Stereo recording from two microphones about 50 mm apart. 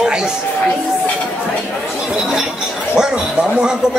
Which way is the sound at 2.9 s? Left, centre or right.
Centre.